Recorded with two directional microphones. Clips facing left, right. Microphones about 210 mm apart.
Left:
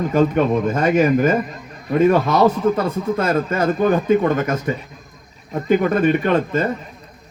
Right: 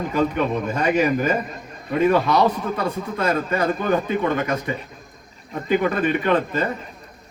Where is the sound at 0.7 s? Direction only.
45° left (ahead or behind).